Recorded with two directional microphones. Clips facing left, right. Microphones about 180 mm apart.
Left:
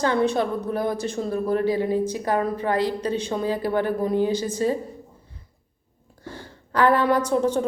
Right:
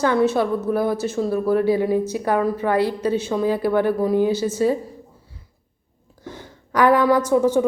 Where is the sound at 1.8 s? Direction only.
15° right (ahead or behind).